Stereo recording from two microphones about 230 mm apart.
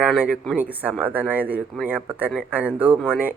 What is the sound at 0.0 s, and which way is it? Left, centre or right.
Speech, centre.